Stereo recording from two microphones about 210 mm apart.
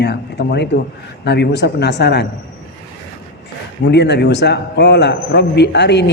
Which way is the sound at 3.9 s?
55° left (ahead or behind).